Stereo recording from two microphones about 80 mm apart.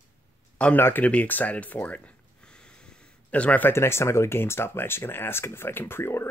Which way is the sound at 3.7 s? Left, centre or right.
Left.